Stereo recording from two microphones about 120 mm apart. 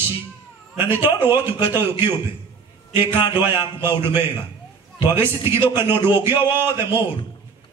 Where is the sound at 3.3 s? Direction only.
20° right (ahead or behind).